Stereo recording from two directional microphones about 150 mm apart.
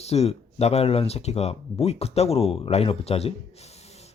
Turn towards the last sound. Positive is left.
turn(degrees=45)  # may be behind; listen again after turning